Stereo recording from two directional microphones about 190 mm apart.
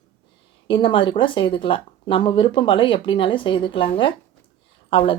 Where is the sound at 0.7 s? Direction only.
25° left (ahead or behind).